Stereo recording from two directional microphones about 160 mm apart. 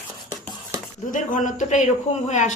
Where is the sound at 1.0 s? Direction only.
55° left (ahead or behind).